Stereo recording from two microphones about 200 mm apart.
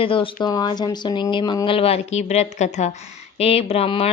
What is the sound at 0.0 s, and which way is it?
A woman's voice, 25° left (ahead or behind).